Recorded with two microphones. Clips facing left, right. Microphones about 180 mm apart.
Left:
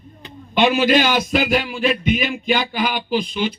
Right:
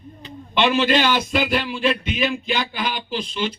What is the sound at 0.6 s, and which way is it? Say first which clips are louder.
Speech: left 3 dB; 45° left (ahead or behind).